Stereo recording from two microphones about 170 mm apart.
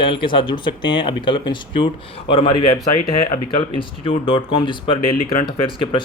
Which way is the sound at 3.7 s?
30° left (ahead or behind).